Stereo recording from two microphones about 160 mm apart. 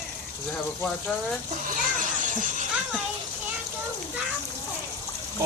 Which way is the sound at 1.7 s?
55° right (ahead or behind).